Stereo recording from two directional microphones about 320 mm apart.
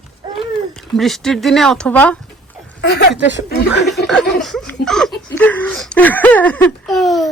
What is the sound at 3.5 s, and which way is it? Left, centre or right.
Speech, left.